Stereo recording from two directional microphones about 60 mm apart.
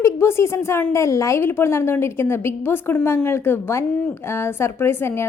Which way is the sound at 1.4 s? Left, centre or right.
Left.